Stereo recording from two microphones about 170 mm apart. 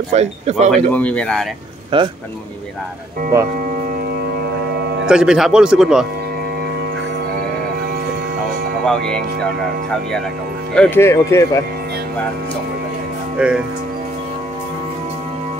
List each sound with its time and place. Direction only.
0.1 s speech: 40° right (ahead or behind)
0.7 s speech: 5° left (ahead or behind)
1.9 s a man's voice: 30° right (ahead or behind)
5.0 s speech: 5° right (ahead or behind)
10.7 s speech: 10° left (ahead or behind)
13.4 s speech: 5° right (ahead or behind)